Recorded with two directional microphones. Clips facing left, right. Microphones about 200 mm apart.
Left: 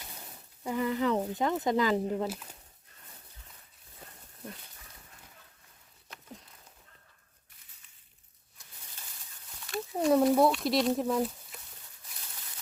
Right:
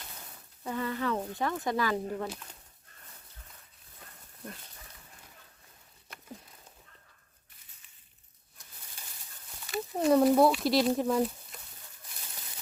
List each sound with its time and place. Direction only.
0.6 s speech: 15° left (ahead or behind)
2.2 s speech: 5° left (ahead or behind)
9.6 s speech: centre (ahead or behind)